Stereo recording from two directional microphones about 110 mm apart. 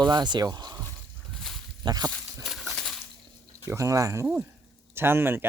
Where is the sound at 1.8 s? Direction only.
40° right (ahead or behind).